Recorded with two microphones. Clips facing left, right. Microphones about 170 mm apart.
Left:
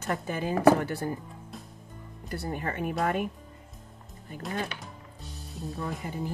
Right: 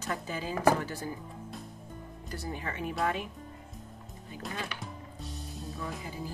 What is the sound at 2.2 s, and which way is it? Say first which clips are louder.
Speech: left 5 dB; 55° left (ahead or behind).